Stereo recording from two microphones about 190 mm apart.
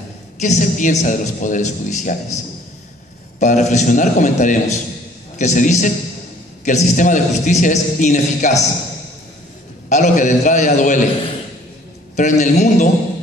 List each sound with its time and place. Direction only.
0.4 s a man's voice: 40° left (ahead or behind)
9.8 s a man's voice: 40° left (ahead or behind)
12.2 s a man's voice: 40° left (ahead or behind)